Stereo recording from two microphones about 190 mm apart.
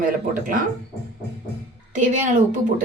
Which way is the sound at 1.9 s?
40° right (ahead or behind).